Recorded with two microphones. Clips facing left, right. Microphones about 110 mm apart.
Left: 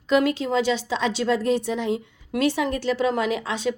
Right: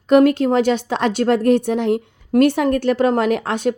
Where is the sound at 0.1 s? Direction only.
50° right (ahead or behind).